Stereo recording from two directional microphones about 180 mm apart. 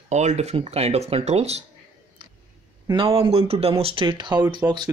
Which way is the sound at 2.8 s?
30° right (ahead or behind).